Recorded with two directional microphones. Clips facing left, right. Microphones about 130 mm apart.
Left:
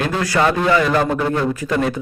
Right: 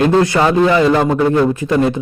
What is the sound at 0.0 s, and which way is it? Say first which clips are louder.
A man's voice: right 6 dB; 25° right (ahead or behind).